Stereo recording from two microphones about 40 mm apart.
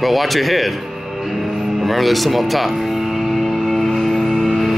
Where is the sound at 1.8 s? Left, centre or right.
Centre.